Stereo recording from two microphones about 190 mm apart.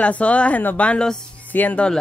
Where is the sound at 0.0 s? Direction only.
5° left (ahead or behind).